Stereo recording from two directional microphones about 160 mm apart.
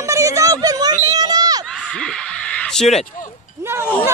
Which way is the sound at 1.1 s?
25° right (ahead or behind).